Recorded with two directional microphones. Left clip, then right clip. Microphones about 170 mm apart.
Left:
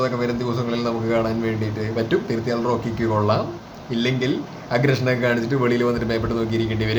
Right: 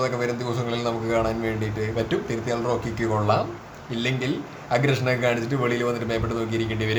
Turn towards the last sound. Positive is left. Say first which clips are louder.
# left 3 dB
turn(degrees=-5)  # may be behind; listen again after turning